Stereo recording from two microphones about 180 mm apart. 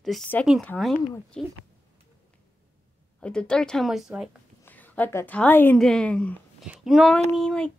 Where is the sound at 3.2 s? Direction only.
5° left (ahead or behind).